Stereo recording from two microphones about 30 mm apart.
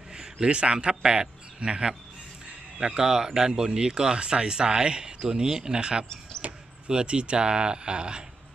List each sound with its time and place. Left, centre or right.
0.1 s a man's voice: right
2.8 s a man's voice: right
6.4 s a sound: right
6.9 s speech: right